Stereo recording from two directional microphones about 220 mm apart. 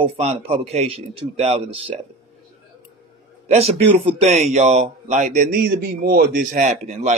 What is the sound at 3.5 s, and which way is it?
Speech, 30° right (ahead or behind).